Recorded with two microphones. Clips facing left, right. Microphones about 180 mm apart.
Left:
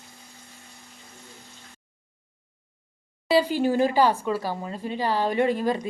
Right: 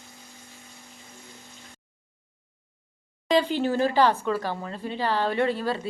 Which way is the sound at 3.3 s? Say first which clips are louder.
Left 2 dB; 10° left (ahead or behind).